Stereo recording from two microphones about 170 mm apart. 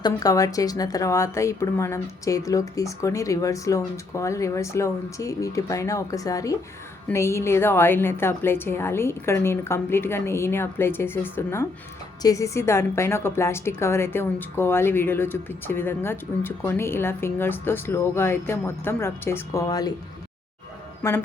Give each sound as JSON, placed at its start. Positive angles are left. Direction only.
{"t": 0.0, "sound": "a woman's voice", "side_deg": 20}
{"t": 21.0, "sound": "a woman's voice", "side_deg": 15}